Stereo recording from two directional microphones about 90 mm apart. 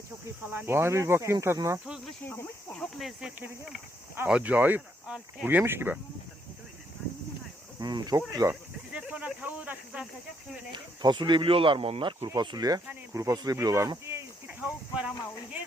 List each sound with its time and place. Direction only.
0.5 s speech: 25° right (ahead or behind)
2.2 s speech: 25° left (ahead or behind)
2.7 s speech: 5° left (ahead or behind)
4.3 s speech: 15° right (ahead or behind)
5.5 s speech: 20° right (ahead or behind)
7.8 s speech: 50° right (ahead or behind)
8.9 s a sound: 15° right (ahead or behind)
11.0 s speech: 60° right (ahead or behind)
12.4 s speech: 50° right (ahead or behind); by 14.3 s 30° right (ahead or behind)
14.4 s speech: 15° right (ahead or behind)